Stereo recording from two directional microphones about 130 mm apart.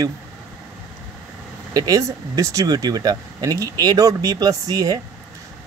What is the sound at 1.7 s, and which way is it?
Speech, 30° right (ahead or behind).